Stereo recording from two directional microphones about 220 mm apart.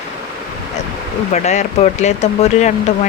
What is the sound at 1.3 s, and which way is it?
Speech, 30° left (ahead or behind).